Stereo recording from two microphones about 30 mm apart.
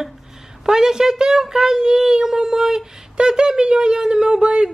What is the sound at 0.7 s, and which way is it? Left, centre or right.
A woman's voice, centre.